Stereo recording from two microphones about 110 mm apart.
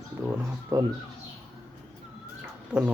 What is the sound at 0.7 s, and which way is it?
Speech, 35° right (ahead or behind).